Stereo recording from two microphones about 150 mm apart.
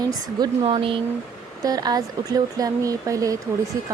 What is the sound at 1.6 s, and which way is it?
Speech, 25° right (ahead or behind).